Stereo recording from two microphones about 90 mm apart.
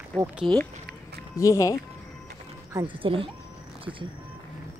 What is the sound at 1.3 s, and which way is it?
Speech, 35° left (ahead or behind).